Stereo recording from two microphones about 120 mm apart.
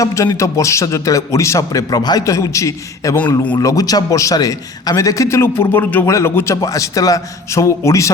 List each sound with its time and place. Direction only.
0.0 s a man's voice: 25° left (ahead or behind)